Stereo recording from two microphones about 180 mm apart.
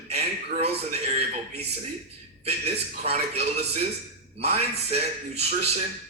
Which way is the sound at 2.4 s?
35° right (ahead or behind).